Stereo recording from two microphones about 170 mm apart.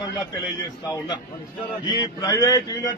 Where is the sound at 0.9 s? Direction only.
25° left (ahead or behind).